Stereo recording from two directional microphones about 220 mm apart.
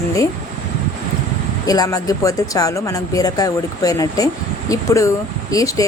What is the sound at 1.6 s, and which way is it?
Speech, 15° left (ahead or behind).